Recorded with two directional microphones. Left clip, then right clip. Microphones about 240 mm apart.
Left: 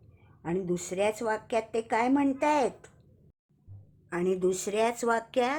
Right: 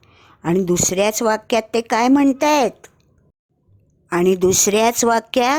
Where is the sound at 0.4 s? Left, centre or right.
Right.